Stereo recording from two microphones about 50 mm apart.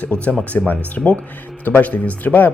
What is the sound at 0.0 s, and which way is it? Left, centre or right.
Speech, left.